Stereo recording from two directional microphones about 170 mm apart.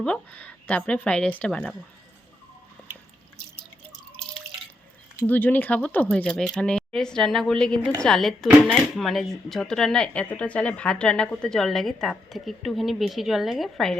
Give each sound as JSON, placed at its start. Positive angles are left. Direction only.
{"t": 0.0, "sound": "speech", "side_deg": 5}
{"t": 4.2, "sound": "drip", "side_deg": 5}
{"t": 5.2, "sound": "speech", "side_deg": 10}